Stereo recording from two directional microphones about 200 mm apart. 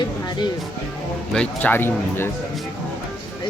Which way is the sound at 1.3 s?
5° left (ahead or behind).